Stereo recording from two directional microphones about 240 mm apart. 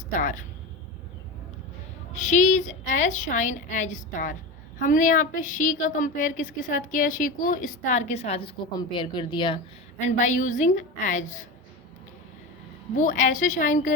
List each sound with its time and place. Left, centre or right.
0.2 s a woman's voice: left
2.1 s a woman's voice: left
10.0 s a woman's voice: left
13.0 s a woman's voice: left